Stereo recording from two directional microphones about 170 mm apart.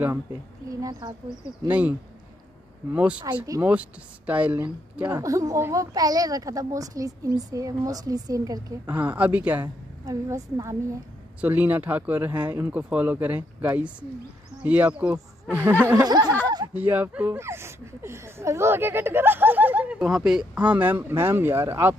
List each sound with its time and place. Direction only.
0.0 s speech: 15° right (ahead or behind)
1.7 s speech: 10° right (ahead or behind)
3.4 s speech: 20° right (ahead or behind)
16.4 s snicker: 25° right (ahead or behind)
16.7 s speech: 10° right (ahead or behind)